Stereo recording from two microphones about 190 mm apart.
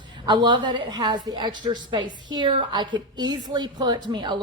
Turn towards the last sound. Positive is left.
turn(degrees=-25)  # may be behind; listen again after turning